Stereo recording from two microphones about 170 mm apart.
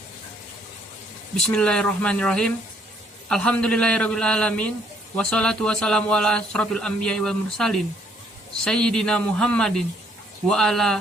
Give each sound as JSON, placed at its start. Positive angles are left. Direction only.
{"t": 1.4, "sound": "a man's voice", "side_deg": 5}